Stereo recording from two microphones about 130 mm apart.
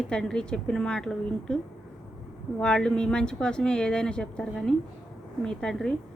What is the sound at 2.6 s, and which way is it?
Speech, 5° left (ahead or behind).